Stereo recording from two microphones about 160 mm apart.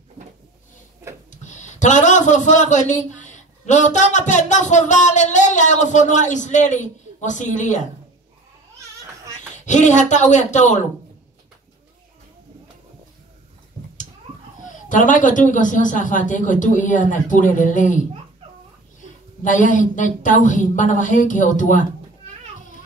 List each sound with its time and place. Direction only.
1.3 s speech: 50° left (ahead or behind)
9.7 s a man's voice: 50° left (ahead or behind)
14.6 s a man's voice: 55° left (ahead or behind)
19.4 s a man's voice: 55° left (ahead or behind)